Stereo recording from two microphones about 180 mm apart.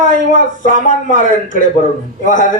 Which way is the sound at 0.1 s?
45° left (ahead or behind).